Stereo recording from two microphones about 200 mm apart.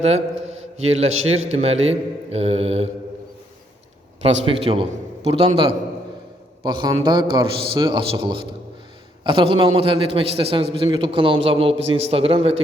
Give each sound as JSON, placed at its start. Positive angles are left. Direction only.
{"t": 0.0, "sound": "a man's voice", "side_deg": -30}
{"t": 4.2, "sound": "a man's voice", "side_deg": -30}